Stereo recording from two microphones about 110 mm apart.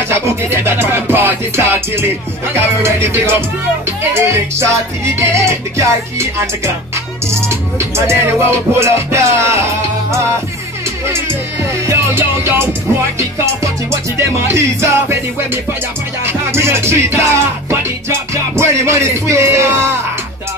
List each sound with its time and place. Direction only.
0.1 s music: 25° right (ahead or behind)
14.1 s music: 25° right (ahead or behind)